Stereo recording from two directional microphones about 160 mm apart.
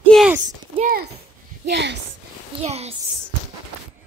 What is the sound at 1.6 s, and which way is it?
Speech, 90° right.